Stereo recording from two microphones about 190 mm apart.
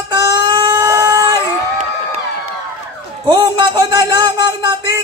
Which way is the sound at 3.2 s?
25° right (ahead or behind).